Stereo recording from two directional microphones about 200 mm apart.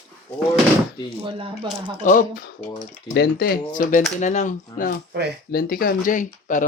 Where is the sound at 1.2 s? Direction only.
25° right (ahead or behind).